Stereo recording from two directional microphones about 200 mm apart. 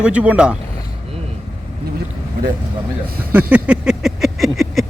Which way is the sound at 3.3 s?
5° right (ahead or behind).